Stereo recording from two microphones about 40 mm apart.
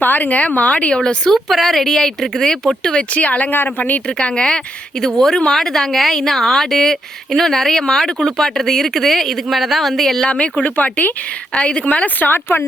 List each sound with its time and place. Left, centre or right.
0.0 s speech: left
1.3 s speech: centre
3.2 s speech: left
3.5 s speech: left
4.2 s speech: left
4.4 s speech: centre
10.2 s speech: left
11.5 s speech: left
12.0 s speech: left